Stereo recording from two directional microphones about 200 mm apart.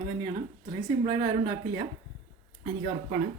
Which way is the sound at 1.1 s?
20° right (ahead or behind).